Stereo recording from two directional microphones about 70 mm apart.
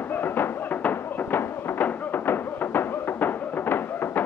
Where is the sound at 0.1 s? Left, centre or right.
Left.